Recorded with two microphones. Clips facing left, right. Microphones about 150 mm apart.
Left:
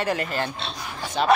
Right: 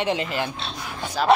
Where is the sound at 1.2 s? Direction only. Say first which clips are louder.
Right 1 dB; centre (ahead or behind).